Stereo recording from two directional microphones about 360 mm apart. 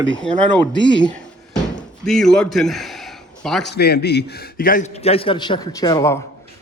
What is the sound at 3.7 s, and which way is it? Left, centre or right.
A man's voice, left.